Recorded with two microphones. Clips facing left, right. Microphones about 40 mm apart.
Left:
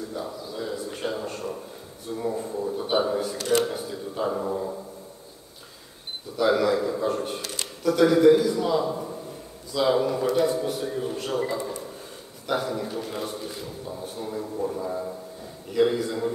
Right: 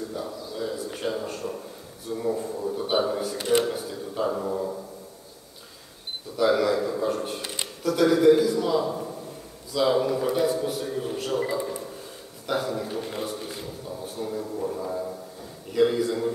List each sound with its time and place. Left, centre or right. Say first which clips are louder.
0.1 s a sound: even; centre
2.1 s a man's voice: right 1 dB; centre
3.3 s speech: right 1 dB; centre
3.6 s a sound: even; centre
4.2 s a man's voice: even; centre
6.3 s a man's voice: even; centre
13.8 s a man's voice: right 2 dB; centre